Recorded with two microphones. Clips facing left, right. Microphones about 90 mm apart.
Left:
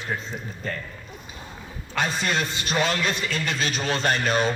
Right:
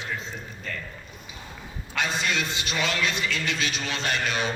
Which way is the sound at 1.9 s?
40° left (ahead or behind).